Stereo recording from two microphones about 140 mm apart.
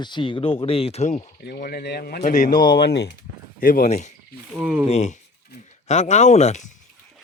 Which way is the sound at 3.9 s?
55° left (ahead or behind).